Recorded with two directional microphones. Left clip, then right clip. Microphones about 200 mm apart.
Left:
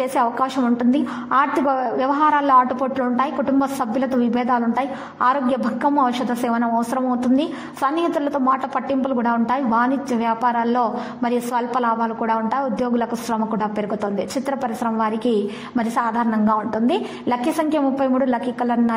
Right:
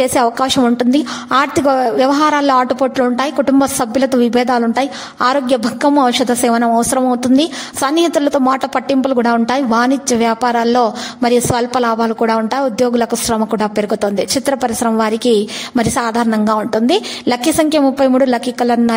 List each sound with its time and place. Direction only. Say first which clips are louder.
0.0 s a woman's voice: right 6 dB; 40° right (ahead or behind)